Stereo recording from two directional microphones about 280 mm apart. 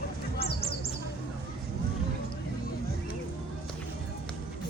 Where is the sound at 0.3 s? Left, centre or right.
Left.